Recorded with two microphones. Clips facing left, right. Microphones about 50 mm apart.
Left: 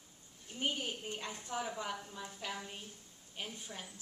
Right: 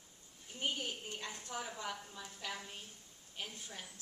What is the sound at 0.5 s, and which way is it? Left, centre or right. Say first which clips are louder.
A woman's voice: left 2 dB; centre.